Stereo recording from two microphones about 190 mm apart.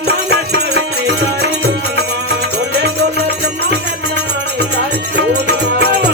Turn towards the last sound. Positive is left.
turn(degrees=-60)  # may be behind; listen again after turning